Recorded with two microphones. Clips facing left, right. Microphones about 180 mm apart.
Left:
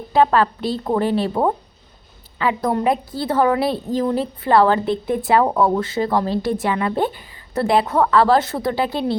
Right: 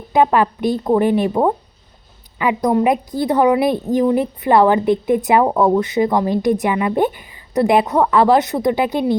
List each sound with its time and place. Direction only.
0.1 s a woman's voice: 15° right (ahead or behind)